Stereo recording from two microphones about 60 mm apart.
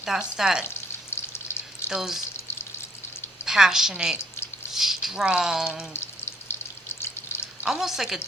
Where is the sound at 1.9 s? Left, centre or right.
Centre.